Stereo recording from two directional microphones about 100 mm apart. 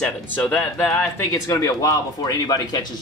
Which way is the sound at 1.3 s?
35° left (ahead or behind).